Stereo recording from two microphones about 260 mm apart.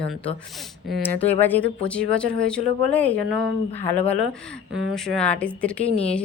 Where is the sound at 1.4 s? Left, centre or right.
Centre.